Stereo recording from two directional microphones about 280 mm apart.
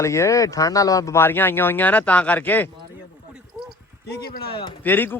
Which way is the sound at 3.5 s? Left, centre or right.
Centre.